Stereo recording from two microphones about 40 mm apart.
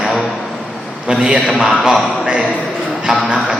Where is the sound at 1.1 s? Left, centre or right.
Right.